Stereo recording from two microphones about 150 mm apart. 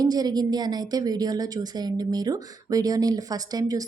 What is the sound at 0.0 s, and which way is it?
Speech, 25° right (ahead or behind).